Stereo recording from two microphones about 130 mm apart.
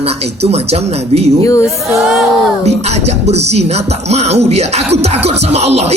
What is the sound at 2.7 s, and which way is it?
Music, 55° right (ahead or behind).